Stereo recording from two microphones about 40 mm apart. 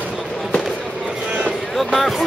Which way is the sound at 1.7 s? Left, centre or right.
Centre.